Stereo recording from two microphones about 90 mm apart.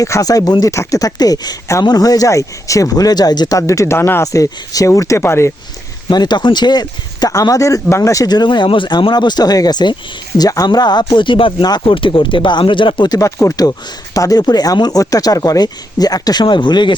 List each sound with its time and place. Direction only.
0.0 s speech: 40° left (ahead or behind)
3.7 s speech: 35° left (ahead or behind)
4.3 s speech: 40° left (ahead or behind)
6.1 s speech: 50° left (ahead or behind)
13.1 s speech: 35° left (ahead or behind); by 17.0 s 60° left (ahead or behind)